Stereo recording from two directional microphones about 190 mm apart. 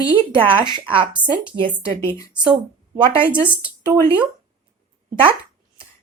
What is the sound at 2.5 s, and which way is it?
Speech, 25° right (ahead or behind).